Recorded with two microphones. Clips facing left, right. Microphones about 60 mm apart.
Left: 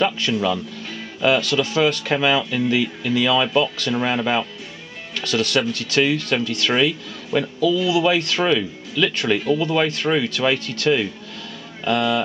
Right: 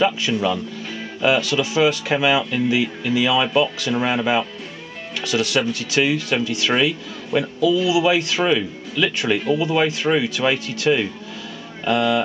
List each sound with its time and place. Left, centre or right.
0.0 s speech: centre